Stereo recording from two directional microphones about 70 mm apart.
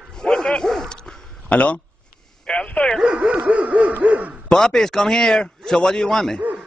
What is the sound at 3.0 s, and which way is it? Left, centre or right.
Dog, centre.